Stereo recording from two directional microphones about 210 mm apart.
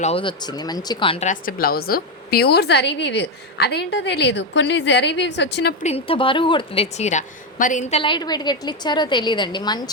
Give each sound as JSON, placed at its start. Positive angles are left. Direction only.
{"t": 0.0, "sound": "speech", "side_deg": 25}
{"t": 5.8, "sound": "a woman's voice", "side_deg": 30}